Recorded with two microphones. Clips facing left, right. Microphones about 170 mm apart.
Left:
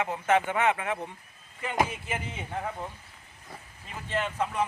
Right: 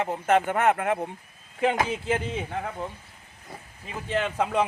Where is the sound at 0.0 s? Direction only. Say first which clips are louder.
Right 3 dB; 40° right (ahead or behind).